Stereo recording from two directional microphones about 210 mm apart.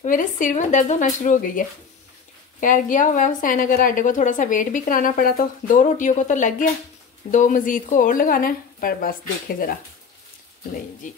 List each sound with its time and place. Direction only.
0.0 s a woman's voice: 40° left (ahead or behind)
11.0 s a woman's voice: 40° left (ahead or behind)